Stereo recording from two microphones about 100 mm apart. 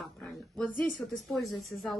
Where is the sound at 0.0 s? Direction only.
Centre (ahead or behind).